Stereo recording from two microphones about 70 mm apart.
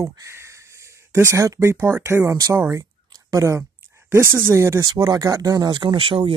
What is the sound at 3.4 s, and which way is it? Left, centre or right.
Speech, right.